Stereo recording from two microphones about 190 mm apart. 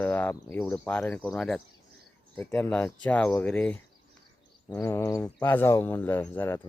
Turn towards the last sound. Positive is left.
turn(degrees=10)  # may be behind; listen again after turning